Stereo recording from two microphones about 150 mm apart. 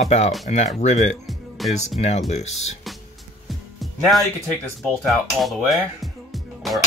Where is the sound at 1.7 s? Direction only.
45° left (ahead or behind).